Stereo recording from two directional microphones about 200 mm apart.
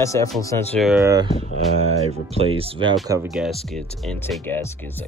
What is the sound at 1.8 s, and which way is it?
Speech, 35° right (ahead or behind).